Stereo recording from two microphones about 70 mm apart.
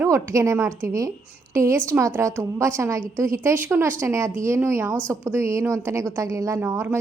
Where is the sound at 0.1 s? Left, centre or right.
Right.